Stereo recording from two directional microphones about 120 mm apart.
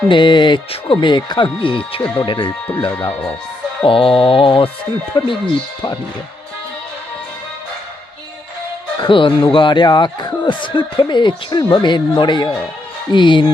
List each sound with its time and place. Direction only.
0.1 s speech: 40° left (ahead or behind)
2.1 s mantra: 45° left (ahead or behind)
3.1 s speech: 10° left (ahead or behind)
3.8 s mantra: 45° left (ahead or behind)
5.1 s speech: 40° left (ahead or behind)
9.0 s speech: 45° left (ahead or behind)